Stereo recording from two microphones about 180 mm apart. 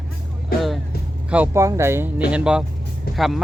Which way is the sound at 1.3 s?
10° right (ahead or behind).